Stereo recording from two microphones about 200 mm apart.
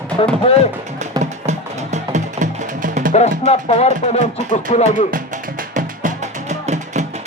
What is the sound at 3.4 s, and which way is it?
Speech, 30° left (ahead or behind).